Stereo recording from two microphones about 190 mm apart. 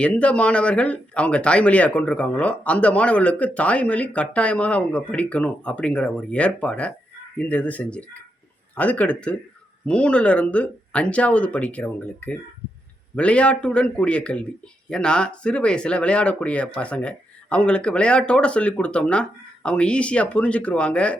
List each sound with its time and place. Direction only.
0.0 s a man's voice: 5° left (ahead or behind)